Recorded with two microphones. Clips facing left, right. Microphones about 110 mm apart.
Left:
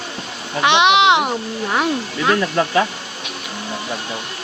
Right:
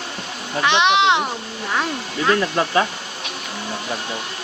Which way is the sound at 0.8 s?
10° left (ahead or behind).